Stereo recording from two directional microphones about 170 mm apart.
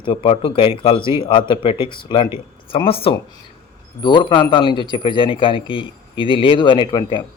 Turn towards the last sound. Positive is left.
turn(degrees=25)  # may be behind; listen again after turning